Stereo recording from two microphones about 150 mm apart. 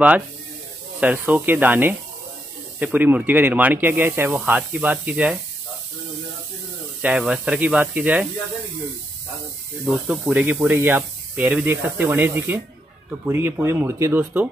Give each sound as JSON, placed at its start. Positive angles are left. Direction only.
{"t": 1.0, "sound": "speech", "side_deg": -10}
{"t": 7.0, "sound": "speech", "side_deg": -5}
{"t": 9.8, "sound": "speech", "side_deg": 0}